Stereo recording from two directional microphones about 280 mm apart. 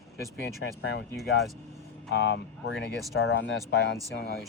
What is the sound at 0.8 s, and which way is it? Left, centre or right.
Speech, left.